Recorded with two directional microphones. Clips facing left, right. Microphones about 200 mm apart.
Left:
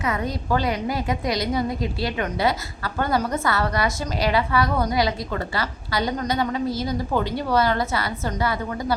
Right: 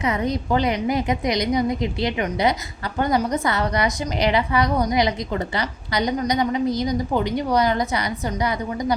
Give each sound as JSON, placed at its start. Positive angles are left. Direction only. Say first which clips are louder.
{"t": 0.0, "sound": "a woman's voice", "louder": "right 3 dB", "side_deg": -20}